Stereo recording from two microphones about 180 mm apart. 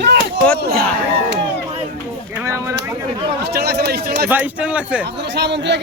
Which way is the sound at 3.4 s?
65° right (ahead or behind).